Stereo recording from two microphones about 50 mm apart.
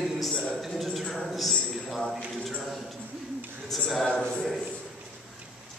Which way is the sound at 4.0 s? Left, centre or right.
Centre.